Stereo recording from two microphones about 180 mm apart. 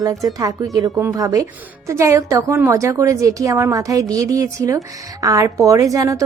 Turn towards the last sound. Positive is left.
turn(degrees=-20)  # may be behind; listen again after turning